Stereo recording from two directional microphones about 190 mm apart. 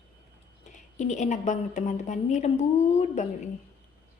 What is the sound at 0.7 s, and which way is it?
A woman's voice, 40° left (ahead or behind).